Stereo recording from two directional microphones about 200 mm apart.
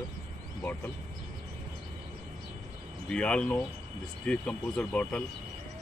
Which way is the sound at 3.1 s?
5° left (ahead or behind).